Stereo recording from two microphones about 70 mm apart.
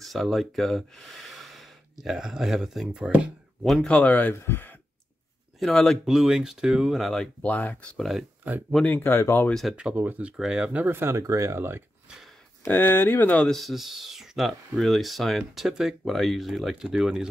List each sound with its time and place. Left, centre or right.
0.0 s speech: centre
3.8 s speech: centre
5.6 s speech: centre
6.0 s speech: centre
7.4 s speech: left
8.0 s speech: centre
8.5 s speech: right
8.8 s speech: left
9.5 s speech: centre
9.8 s speech: centre
10.3 s speech: centre
10.9 s speech: right
12.6 s speech: left
13.5 s speech: centre